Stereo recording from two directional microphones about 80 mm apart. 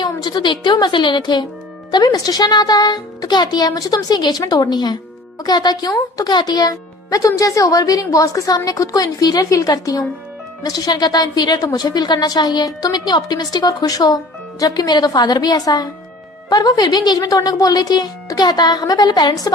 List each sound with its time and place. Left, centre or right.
0.0 s a woman's voice: left
1.9 s speech: left